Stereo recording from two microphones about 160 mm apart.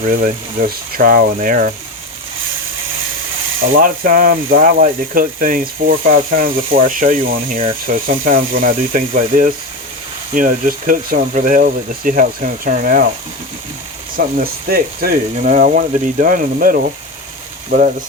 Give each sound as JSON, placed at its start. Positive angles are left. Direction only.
{"t": 0.0, "sound": "speech", "side_deg": -55}
{"t": 3.6, "sound": "speech", "side_deg": -60}
{"t": 14.2, "sound": "speech", "side_deg": -60}
{"t": 15.4, "sound": "speech", "side_deg": -55}